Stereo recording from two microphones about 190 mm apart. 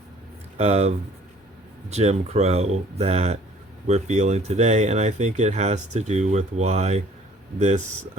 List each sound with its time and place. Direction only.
0.5 s speech: 35° right (ahead or behind)